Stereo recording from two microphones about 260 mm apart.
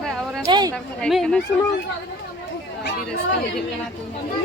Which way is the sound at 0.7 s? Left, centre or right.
Centre.